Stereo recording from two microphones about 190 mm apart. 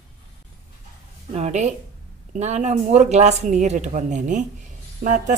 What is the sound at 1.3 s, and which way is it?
A woman's voice, 35° right (ahead or behind).